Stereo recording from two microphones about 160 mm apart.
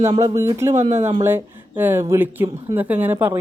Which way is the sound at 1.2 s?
15° right (ahead or behind).